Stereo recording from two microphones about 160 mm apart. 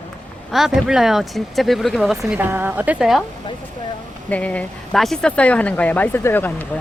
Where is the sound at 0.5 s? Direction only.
Centre (ahead or behind).